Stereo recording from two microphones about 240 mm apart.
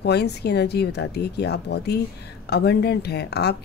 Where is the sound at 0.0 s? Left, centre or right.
Left.